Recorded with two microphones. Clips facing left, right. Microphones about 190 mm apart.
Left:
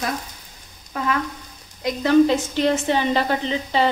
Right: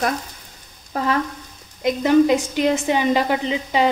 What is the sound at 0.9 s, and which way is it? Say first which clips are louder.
Frying: right 3 dB; 40° right (ahead or behind).